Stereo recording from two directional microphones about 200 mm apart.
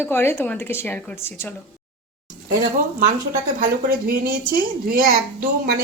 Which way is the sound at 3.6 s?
45° right (ahead or behind).